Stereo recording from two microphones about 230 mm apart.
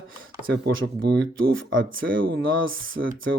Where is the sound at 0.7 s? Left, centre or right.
Right.